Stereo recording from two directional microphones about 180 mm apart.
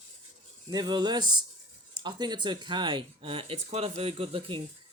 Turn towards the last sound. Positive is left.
turn(degrees=-30)  # may be behind; listen again after turning